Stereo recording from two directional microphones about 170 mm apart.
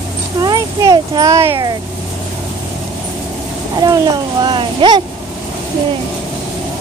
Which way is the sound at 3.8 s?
25° right (ahead or behind).